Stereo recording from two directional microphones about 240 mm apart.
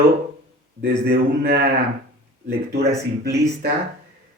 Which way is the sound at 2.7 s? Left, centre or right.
Right.